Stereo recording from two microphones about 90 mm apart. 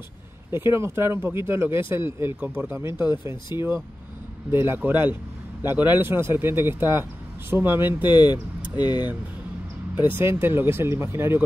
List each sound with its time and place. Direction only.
0.7 s speech: 30° right (ahead or behind)
8.1 s speech: 55° left (ahead or behind)
9.9 s speech: 25° right (ahead or behind)